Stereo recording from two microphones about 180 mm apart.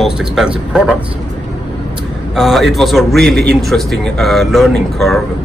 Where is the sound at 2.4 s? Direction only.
Centre (ahead or behind).